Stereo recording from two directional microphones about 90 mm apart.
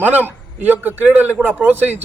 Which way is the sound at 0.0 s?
20° right (ahead or behind).